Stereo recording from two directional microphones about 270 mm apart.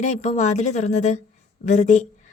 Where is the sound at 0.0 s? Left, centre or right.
Left.